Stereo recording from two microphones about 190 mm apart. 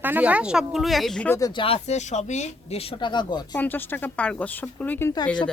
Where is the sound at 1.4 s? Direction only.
25° left (ahead or behind).